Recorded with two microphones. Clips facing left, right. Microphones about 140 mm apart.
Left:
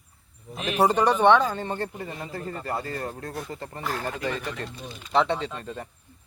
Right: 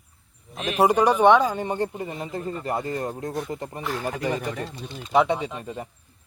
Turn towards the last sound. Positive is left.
turn(degrees=-15)  # may be behind; listen again after turning